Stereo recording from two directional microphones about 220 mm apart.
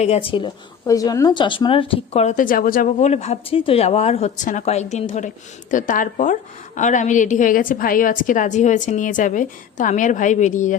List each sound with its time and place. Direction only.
0.0 s a woman's voice: 25° left (ahead or behind)